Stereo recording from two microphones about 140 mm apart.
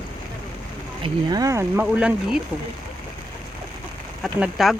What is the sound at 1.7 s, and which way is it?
Speech, 10° right (ahead or behind).